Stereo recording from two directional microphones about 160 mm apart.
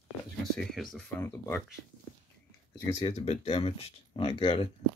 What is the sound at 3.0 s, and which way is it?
Speech, 40° left (ahead or behind).